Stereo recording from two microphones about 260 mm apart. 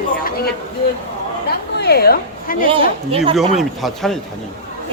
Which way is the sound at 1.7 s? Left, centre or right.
Left.